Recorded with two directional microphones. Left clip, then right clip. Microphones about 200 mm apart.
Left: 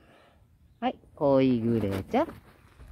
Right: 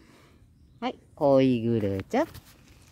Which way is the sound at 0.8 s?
20° left (ahead or behind).